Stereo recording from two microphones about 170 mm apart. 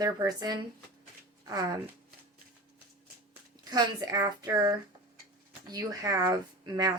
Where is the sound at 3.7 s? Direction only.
20° right (ahead or behind).